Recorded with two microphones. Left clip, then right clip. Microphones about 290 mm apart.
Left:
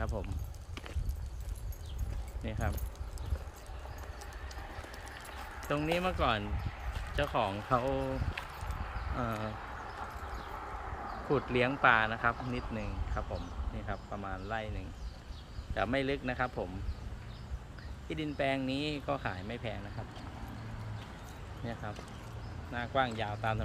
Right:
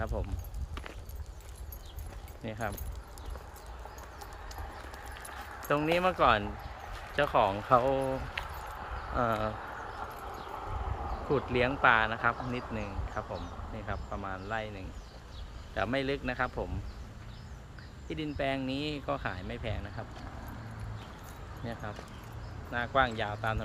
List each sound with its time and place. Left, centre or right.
0.0 s speech: centre
2.4 s speech: centre
4.2 s clip-clop: centre
7.2 s speech: centre
8.5 s a sound: right
9.1 s speech: centre
9.6 s a sound: right
11.8 s speech: centre
12.4 s speech: right
13.2 s speech: centre
18.1 s speech: centre
21.6 s speech: centre